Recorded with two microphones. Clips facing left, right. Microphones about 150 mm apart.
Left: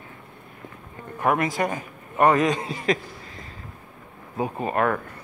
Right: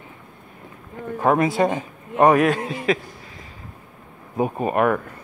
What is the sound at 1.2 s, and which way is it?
A man's voice, 25° right (ahead or behind).